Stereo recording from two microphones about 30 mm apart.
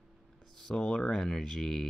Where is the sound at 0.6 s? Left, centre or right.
Centre.